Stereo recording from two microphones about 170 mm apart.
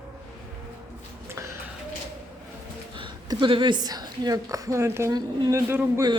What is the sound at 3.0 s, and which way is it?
A woman's voice, 30° right (ahead or behind).